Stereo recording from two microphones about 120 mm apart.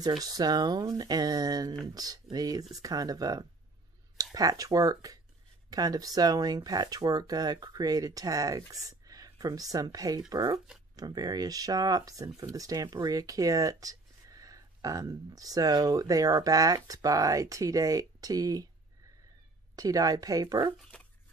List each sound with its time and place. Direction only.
0.0 s speech: 35° right (ahead or behind)
19.7 s speech: 30° right (ahead or behind)